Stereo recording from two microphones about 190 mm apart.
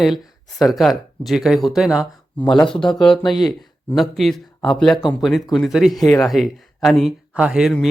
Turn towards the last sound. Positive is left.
turn(degrees=0)  # may be behind; listen again after turning